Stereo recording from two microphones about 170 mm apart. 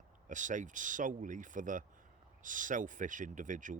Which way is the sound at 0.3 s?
45° right (ahead or behind).